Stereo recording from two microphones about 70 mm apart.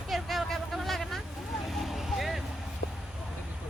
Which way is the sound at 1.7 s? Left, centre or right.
Centre.